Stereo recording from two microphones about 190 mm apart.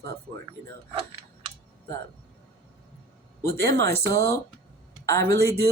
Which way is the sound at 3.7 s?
60° right (ahead or behind).